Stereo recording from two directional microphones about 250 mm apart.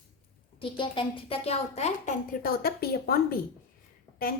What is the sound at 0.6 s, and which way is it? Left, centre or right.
A woman's voice, centre.